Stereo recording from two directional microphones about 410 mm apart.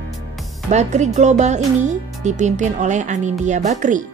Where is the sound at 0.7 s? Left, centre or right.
Centre.